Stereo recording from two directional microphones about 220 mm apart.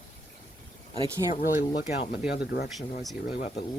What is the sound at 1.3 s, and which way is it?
Speech, 35° left (ahead or behind).